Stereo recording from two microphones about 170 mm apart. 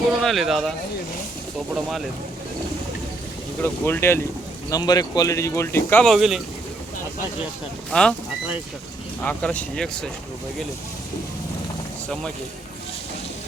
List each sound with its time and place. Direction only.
0.1 s speech: centre (ahead or behind)
1.7 s speech: centre (ahead or behind)
3.6 s speech: 15° left (ahead or behind); by 6.4 s 5° right (ahead or behind)
7.9 s speech: 5° left (ahead or behind)
9.2 s speech: 10° left (ahead or behind)